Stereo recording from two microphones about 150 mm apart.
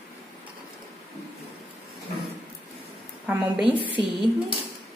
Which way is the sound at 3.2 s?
10° right (ahead or behind).